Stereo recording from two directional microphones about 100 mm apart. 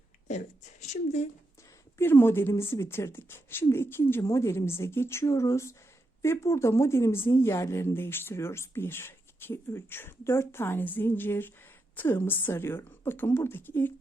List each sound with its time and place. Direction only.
2.0 s speech: 25° left (ahead or behind)